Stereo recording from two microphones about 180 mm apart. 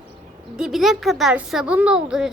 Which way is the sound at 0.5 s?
Centre (ahead or behind).